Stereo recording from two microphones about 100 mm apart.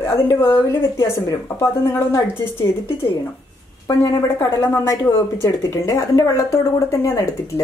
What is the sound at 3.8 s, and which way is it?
Speech, 30° left (ahead or behind).